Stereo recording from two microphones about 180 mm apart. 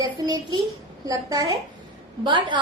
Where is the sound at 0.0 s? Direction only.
20° right (ahead or behind).